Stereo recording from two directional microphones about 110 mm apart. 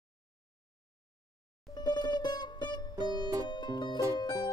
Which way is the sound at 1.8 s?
40° left (ahead or behind).